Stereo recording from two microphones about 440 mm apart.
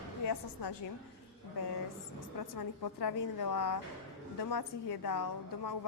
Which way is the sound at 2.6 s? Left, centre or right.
Left.